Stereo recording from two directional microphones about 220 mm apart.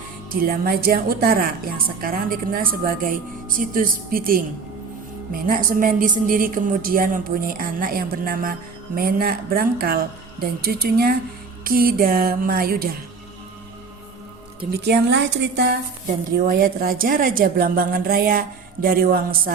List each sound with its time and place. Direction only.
0.3 s a woman's voice: 40° right (ahead or behind)
14.7 s speech: 50° right (ahead or behind)
16.3 s a woman's voice: 40° right (ahead or behind)